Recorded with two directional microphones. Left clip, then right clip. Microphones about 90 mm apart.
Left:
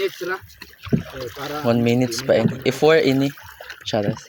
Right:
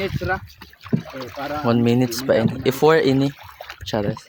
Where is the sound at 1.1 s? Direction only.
50° left (ahead or behind).